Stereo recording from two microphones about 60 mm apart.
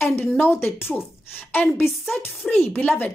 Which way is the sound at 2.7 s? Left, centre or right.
Left.